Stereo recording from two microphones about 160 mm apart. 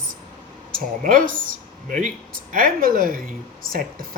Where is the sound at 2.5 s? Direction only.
60° right (ahead or behind).